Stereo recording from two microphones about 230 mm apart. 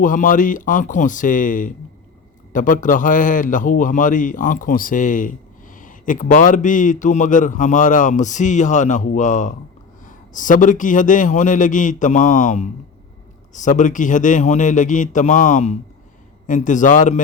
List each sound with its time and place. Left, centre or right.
0.0 s a man's voice: left